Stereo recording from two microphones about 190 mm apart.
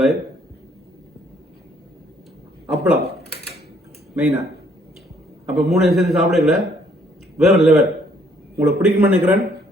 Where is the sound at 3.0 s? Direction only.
60° left (ahead or behind).